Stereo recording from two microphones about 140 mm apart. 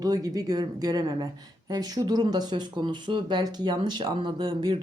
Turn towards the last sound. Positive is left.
turn(degrees=-35)  # may be behind; listen again after turning